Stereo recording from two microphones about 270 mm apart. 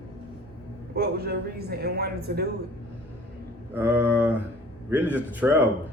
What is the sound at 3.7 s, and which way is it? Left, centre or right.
Speech, centre.